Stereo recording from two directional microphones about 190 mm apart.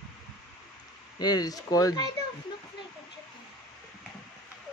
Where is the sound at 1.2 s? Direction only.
20° left (ahead or behind).